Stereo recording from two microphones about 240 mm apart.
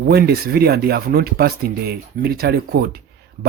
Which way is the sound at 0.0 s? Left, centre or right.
Right.